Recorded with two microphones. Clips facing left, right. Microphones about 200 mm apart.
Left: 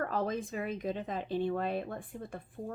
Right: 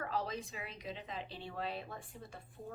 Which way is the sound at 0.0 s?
50° left (ahead or behind).